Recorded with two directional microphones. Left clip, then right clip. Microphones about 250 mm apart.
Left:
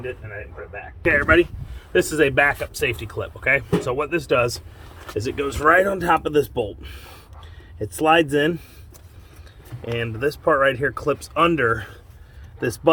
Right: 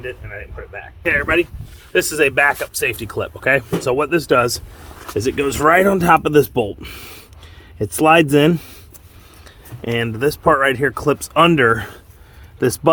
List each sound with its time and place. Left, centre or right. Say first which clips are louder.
1.0 s speech: even; right
9.8 s speech: right 5 dB; right